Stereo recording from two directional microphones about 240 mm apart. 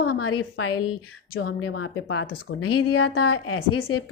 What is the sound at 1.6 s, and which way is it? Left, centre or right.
A woman's voice, left.